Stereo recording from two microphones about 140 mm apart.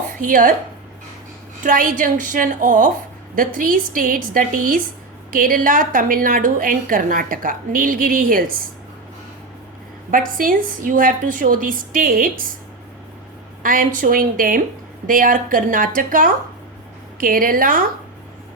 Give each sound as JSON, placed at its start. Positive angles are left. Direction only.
{"t": 0.1, "sound": "speech", "side_deg": -75}
{"t": 1.6, "sound": "a woman's voice", "side_deg": -80}
{"t": 3.3, "sound": "a woman's voice", "side_deg": -80}
{"t": 10.1, "sound": "a woman's voice", "side_deg": -80}
{"t": 13.6, "sound": "a woman's voice", "side_deg": -85}